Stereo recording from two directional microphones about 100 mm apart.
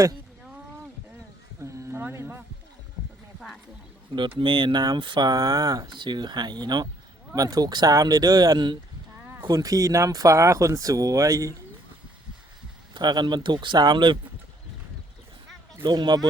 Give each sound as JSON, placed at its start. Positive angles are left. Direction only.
{"t": 1.6, "sound": "a sound", "side_deg": -25}
{"t": 4.1, "sound": "speech", "side_deg": -55}
{"t": 5.3, "sound": "speech", "side_deg": -35}
{"t": 9.2, "sound": "a sound", "side_deg": -20}
{"t": 9.5, "sound": "speech", "side_deg": -35}
{"t": 12.9, "sound": "speech", "side_deg": -45}
{"t": 15.8, "sound": "speech", "side_deg": -45}